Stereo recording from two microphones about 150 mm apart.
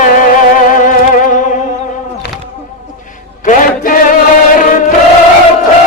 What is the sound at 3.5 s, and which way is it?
Mantra, 65° left (ahead or behind).